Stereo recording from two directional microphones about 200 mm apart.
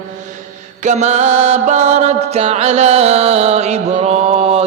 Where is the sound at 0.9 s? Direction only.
35° right (ahead or behind).